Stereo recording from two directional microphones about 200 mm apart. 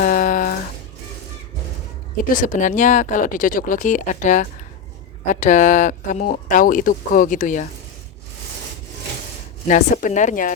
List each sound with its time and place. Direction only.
0.0 s a sound: 45° left (ahead or behind)
2.3 s speech: 40° left (ahead or behind)
9.6 s speech: 40° left (ahead or behind)